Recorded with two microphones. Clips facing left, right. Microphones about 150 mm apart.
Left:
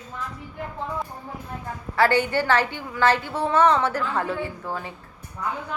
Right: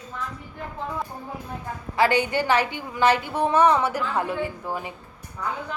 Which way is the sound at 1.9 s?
15° right (ahead or behind).